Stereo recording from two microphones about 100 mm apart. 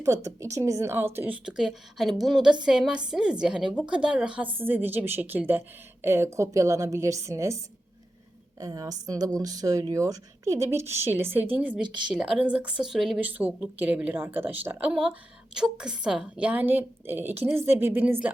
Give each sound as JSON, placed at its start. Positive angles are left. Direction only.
{"t": 0.0, "sound": "a woman's voice", "side_deg": -30}
{"t": 1.5, "sound": "a woman's voice", "side_deg": -5}
{"t": 4.5, "sound": "a woman's voice", "side_deg": -20}
{"t": 13.1, "sound": "a woman's voice", "side_deg": -15}